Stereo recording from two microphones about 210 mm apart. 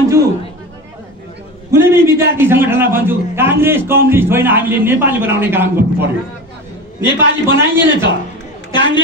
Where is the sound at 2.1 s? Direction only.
10° right (ahead or behind).